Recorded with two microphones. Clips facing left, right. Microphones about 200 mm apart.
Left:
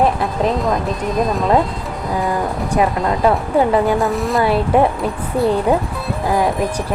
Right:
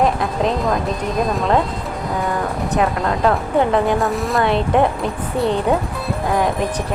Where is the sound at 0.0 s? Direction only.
Centre (ahead or behind).